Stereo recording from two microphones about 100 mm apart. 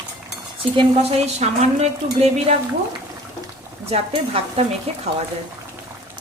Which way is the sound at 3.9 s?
90° right.